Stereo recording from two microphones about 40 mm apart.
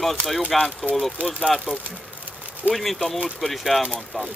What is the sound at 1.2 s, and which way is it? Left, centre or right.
Speech, right.